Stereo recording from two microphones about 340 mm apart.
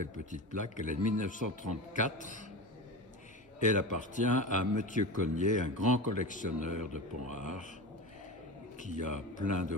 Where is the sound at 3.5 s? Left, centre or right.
Left.